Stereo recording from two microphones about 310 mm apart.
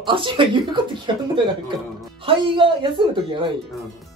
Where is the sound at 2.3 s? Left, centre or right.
Centre.